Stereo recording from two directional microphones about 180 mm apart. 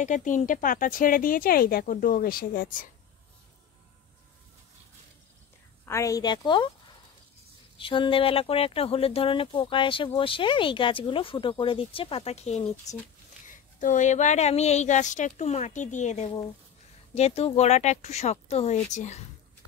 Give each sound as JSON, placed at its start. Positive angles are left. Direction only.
{"t": 0.0, "sound": "speech", "side_deg": 45}
{"t": 5.9, "sound": "speech", "side_deg": 15}
{"t": 7.7, "sound": "a woman's voice", "side_deg": 30}